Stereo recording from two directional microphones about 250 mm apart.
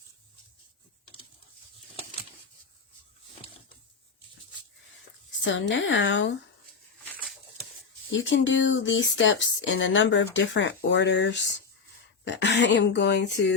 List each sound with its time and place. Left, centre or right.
5.5 s speech: left
8.1 s speech: left